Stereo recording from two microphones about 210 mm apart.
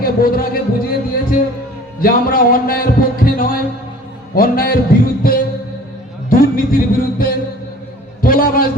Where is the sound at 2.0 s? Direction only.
45° left (ahead or behind).